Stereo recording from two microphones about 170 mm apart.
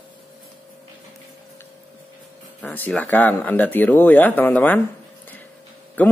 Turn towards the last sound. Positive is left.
turn(degrees=10)  # may be behind; listen again after turning